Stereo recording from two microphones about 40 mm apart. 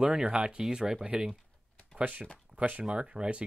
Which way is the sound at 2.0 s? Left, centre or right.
Right.